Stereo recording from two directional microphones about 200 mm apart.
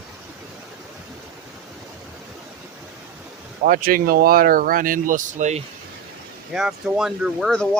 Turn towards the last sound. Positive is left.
turn(degrees=0)  # may be behind; listen again after turning